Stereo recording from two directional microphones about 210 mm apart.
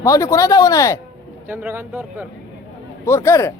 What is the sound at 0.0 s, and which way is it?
Speech, 15° left (ahead or behind).